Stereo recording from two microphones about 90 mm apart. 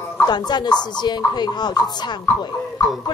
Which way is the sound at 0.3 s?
50° left (ahead or behind).